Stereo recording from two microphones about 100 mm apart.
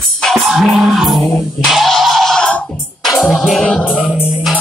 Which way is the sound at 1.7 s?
Centre (ahead or behind).